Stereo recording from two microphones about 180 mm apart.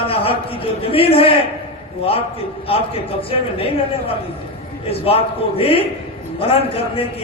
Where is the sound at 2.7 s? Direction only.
30° left (ahead or behind).